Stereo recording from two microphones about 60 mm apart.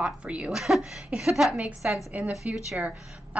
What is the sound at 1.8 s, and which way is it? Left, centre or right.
Speech, right.